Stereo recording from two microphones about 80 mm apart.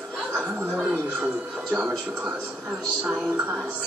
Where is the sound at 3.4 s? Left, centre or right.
Centre.